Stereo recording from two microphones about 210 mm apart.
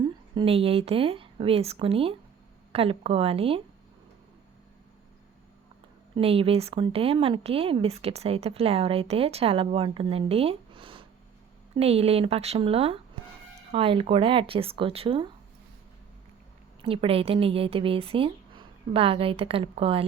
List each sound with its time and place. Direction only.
0.3 s a woman's voice: 25° right (ahead or behind)
6.1 s a woman's voice: 25° right (ahead or behind)
16.8 s a woman's voice: 25° right (ahead or behind)